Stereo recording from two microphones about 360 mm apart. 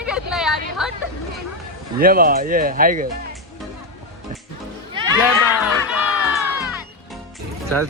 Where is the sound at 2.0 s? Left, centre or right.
Right.